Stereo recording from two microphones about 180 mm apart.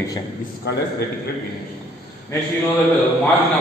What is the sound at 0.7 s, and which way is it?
Speech, 65° left (ahead or behind).